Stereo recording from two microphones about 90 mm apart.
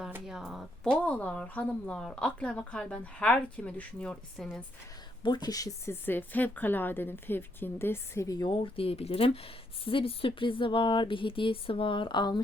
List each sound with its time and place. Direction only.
0.3 s speech: 5° right (ahead or behind)
0.9 s speech: 10° left (ahead or behind)
5.2 s speech: 50° left (ahead or behind)
5.9 s a woman's voice: 20° left (ahead or behind)
8.4 s speech: 85° left; by 12.4 s 55° left (ahead or behind)